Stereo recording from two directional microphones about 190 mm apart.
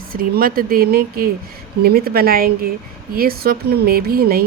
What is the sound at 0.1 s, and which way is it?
Speech, 50° right (ahead or behind).